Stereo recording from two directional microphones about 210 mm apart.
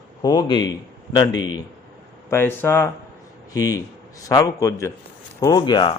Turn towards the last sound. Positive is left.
turn(degrees=25)  # may be behind; listen again after turning